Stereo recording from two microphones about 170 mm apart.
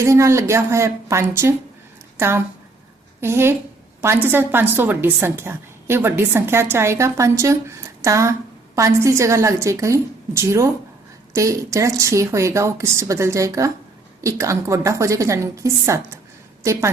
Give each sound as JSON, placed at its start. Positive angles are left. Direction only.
{"t": 0.0, "sound": "a woman's voice", "side_deg": -15}